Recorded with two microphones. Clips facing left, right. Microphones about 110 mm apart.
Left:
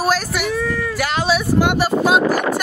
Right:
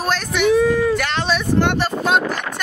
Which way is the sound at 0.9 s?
5° left (ahead or behind).